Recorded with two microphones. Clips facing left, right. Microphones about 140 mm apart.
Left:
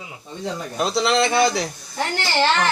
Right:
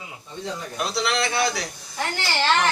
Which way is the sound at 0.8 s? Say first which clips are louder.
Left 6 dB; 25° left (ahead or behind).